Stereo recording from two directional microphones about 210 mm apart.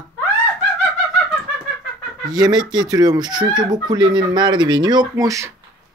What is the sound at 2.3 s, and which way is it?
Speech, 20° right (ahead or behind).